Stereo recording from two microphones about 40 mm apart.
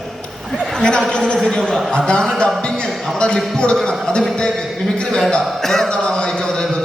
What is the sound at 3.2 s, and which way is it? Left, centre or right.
Speech, left.